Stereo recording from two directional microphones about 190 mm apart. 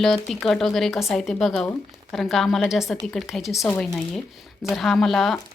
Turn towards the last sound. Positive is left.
turn(degrees=0)  # may be behind; listen again after turning